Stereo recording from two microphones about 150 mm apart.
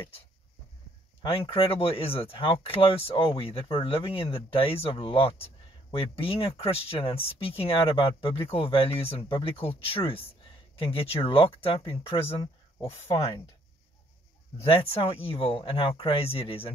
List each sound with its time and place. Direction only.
1.5 s speech: 40° left (ahead or behind)
14.7 s speech: 40° left (ahead or behind)